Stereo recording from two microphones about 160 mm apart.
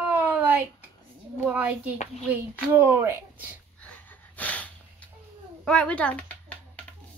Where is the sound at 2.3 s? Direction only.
15° right (ahead or behind).